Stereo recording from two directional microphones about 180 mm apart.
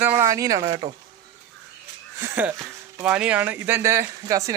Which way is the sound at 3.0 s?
5° right (ahead or behind).